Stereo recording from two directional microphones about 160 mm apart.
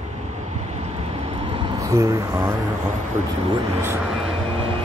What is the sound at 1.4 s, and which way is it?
Vehicle, 35° right (ahead or behind).